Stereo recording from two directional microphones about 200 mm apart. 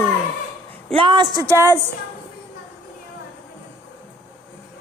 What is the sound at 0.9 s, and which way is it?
Speech, 25° right (ahead or behind).